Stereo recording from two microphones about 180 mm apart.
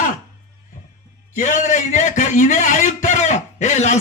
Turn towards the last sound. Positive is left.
turn(degrees=40)  # may be behind; listen again after turning